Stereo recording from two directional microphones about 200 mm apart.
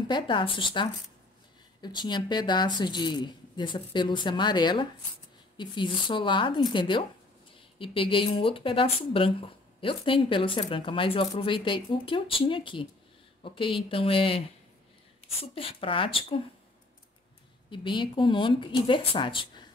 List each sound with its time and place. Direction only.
0.1 s speech: 25° left (ahead or behind)
15.5 s speech: 25° left (ahead or behind)
17.6 s speech: 25° left (ahead or behind)